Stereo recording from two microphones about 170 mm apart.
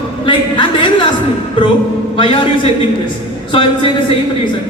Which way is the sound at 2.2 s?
30° left (ahead or behind).